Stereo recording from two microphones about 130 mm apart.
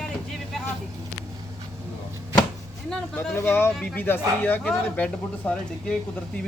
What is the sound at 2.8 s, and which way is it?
Speech, 5° left (ahead or behind).